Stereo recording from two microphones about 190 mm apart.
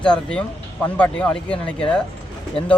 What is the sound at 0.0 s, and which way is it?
Speech, 5° left (ahead or behind).